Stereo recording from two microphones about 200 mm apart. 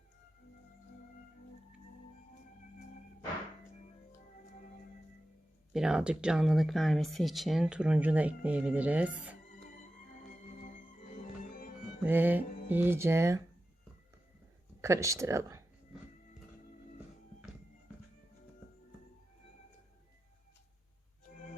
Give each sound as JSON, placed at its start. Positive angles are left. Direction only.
{"t": 5.7, "sound": "speech", "side_deg": -5}
{"t": 10.6, "sound": "music", "side_deg": 40}
{"t": 12.0, "sound": "speech", "side_deg": -10}
{"t": 14.8, "sound": "speech", "side_deg": -15}